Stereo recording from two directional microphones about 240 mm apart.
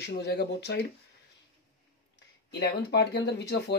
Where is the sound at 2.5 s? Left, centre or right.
Left.